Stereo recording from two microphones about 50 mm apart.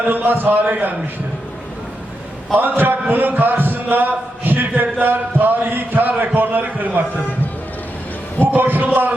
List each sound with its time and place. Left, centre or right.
0.1 s a man's voice: right
2.6 s a man's voice: right
8.4 s a man's voice: right